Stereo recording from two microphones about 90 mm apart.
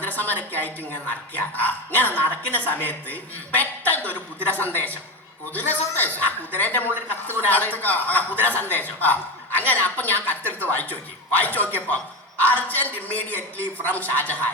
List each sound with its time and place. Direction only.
0.0 s a woman's voice: 20° left (ahead or behind)